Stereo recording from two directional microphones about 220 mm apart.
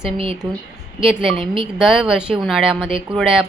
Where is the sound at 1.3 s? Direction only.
25° right (ahead or behind).